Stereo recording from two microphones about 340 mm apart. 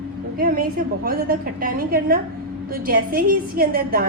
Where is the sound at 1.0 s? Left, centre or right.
Right.